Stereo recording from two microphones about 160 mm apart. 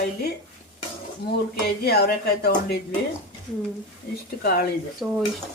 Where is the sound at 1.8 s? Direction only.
85° left.